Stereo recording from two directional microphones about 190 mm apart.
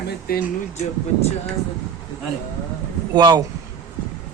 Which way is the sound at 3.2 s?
20° right (ahead or behind).